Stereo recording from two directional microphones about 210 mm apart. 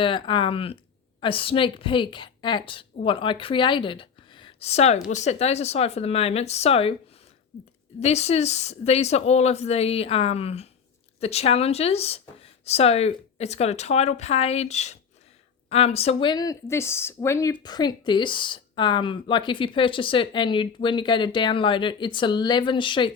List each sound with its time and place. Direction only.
0.0 s speech: 25° left (ahead or behind)
7.9 s speech: 30° left (ahead or behind)